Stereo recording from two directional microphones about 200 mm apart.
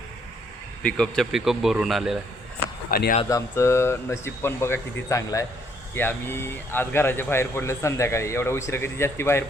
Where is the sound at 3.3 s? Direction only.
15° left (ahead or behind).